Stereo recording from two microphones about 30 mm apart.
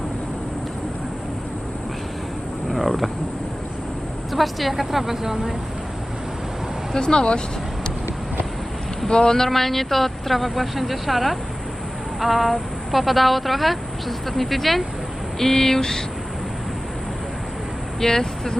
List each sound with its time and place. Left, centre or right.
2.6 s wild animals: centre
4.3 s a woman's voice: centre
6.9 s speech: left
9.0 s speech: left
9.5 s a woman's voice: centre
15.4 s a sound: centre
18.0 s a sound: centre